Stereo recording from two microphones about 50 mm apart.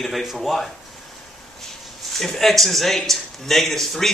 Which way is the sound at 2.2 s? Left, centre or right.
Centre.